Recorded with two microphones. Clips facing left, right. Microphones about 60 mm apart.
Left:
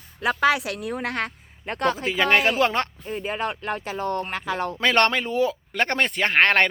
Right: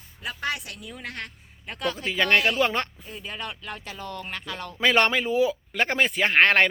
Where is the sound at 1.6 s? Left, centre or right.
Left.